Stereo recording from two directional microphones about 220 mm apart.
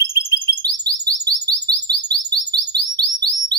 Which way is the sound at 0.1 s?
15° right (ahead or behind).